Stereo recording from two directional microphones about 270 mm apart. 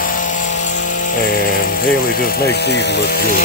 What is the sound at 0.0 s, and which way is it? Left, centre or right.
Helicopter, left.